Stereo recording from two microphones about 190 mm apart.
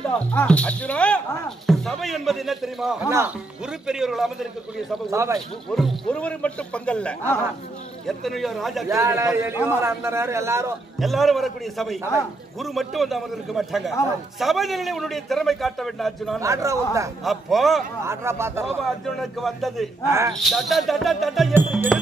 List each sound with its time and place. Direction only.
0.3 s a man's voice: 10° left (ahead or behind)
5.1 s a man's voice: 15° right (ahead or behind)
5.8 s a man's voice: centre (ahead or behind)
8.8 s a man's voice: 15° right (ahead or behind)
11.0 s a man's voice: centre (ahead or behind)
16.3 s a man's voice: 15° right (ahead or behind)
17.2 s a man's voice: centre (ahead or behind)
18.0 s a man's voice: 15° right (ahead or behind)
19.0 s a man's voice: centre (ahead or behind)
20.1 s a man's voice: 15° right (ahead or behind)
20.3 s a man's voice: centre (ahead or behind)